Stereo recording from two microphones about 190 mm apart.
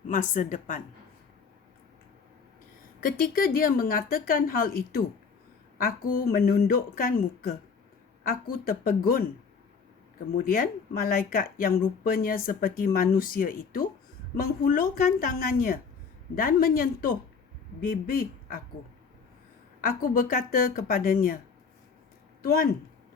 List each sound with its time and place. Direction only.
0.1 s speech: 40° left (ahead or behind)
3.0 s speech: 50° left (ahead or behind)
8.3 s speech: 50° left (ahead or behind)
10.3 s speech: 50° left (ahead or behind)
19.9 s speech: 50° left (ahead or behind)